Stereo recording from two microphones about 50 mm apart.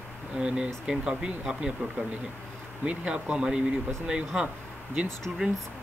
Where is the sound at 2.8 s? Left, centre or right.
Right.